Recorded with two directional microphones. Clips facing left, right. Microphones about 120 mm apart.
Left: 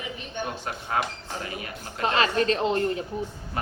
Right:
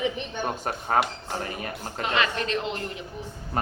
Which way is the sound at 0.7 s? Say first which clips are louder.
Right 5 dB; 40° right (ahead or behind).